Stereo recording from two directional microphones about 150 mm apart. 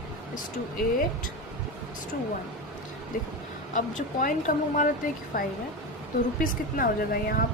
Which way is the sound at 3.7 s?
60° left (ahead or behind).